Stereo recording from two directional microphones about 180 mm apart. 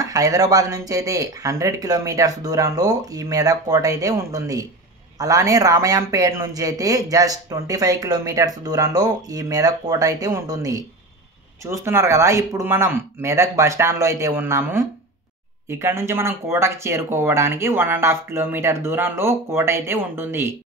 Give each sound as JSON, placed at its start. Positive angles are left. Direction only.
{"t": 0.0, "sound": "a man's voice", "side_deg": -20}